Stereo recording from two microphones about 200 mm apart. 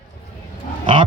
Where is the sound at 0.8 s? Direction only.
25° right (ahead or behind).